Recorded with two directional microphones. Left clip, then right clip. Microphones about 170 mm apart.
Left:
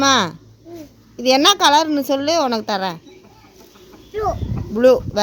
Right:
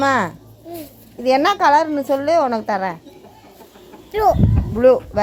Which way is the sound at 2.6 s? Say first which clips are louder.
Right 1 dB; 15° left (ahead or behind).